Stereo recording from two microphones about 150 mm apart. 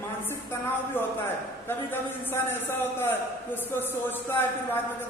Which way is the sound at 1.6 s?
15° left (ahead or behind).